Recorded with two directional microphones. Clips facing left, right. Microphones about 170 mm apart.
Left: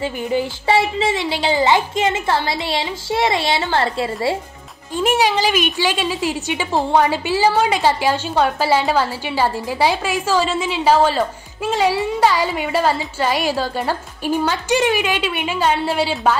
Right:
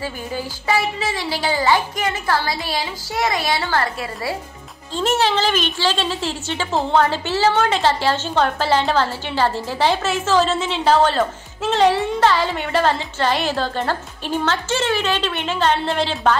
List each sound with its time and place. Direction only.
0.0 s a woman's voice: 20° left (ahead or behind)
4.9 s a woman's voice: 10° left (ahead or behind)